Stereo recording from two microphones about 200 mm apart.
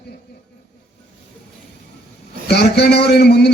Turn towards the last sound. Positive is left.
turn(degrees=55)  # may be behind; listen again after turning